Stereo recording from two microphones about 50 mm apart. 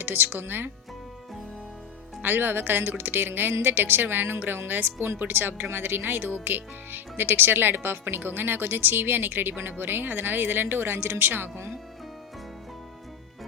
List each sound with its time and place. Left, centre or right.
0.0 s speech: right
2.2 s speech: right